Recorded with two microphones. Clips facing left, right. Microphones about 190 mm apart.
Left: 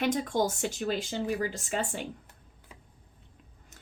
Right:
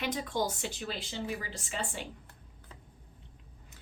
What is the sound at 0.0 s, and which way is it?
A woman's voice, 50° left (ahead or behind).